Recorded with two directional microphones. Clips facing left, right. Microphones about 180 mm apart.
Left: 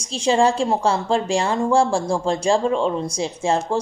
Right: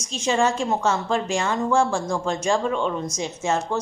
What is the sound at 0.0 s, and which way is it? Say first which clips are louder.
A woman's voice: left 4 dB; 30° left (ahead or behind).